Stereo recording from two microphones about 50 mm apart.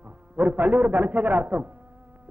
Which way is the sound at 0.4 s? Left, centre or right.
Right.